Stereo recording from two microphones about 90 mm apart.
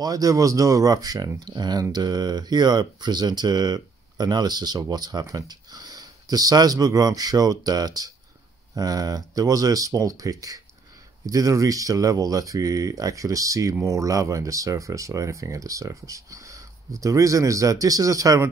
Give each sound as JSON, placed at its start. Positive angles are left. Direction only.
{"t": 0.0, "sound": "speech", "side_deg": -45}